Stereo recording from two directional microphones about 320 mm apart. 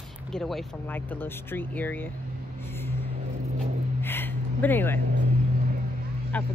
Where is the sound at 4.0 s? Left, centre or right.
Centre.